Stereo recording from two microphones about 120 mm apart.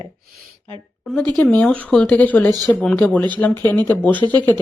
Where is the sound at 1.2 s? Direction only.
10° left (ahead or behind).